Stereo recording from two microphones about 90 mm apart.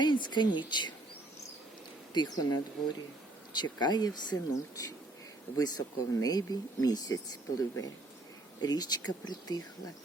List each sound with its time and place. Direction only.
0.0 s speech: 60° left (ahead or behind)
2.1 s speech: 45° left (ahead or behind)